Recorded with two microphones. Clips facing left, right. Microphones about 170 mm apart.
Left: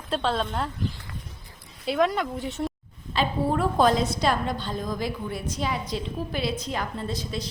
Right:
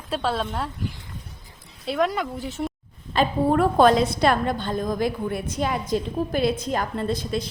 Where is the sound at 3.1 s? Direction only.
60° right (ahead or behind).